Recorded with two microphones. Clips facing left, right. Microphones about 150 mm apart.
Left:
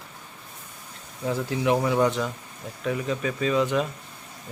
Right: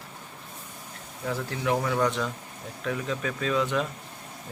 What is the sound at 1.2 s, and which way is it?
Speech, 15° left (ahead or behind).